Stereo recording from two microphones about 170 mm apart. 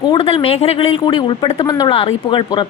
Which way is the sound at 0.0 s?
30° left (ahead or behind).